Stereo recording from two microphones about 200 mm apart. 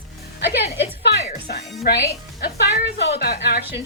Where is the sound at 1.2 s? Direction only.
40° left (ahead or behind).